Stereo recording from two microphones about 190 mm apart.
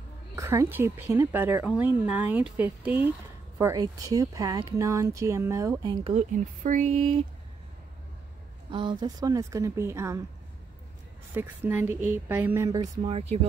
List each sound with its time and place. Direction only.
0.4 s speech: 15° right (ahead or behind); by 7.2 s 35° right (ahead or behind)
8.6 s speech: 25° right (ahead or behind)
11.3 s speech: 10° right (ahead or behind); by 13.5 s 30° right (ahead or behind)